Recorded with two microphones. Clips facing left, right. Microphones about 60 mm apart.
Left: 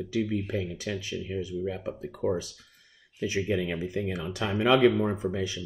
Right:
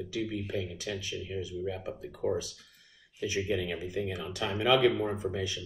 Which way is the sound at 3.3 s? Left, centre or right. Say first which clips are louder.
Left 3 dB; left.